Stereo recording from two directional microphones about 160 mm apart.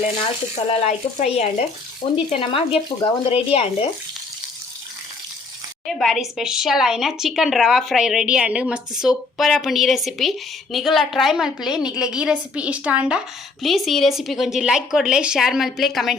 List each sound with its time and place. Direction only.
0.9 s speech: 45° left (ahead or behind)
5.8 s a woman's voice: centre (ahead or behind)